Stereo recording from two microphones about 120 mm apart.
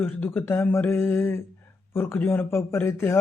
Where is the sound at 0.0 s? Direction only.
15° left (ahead or behind).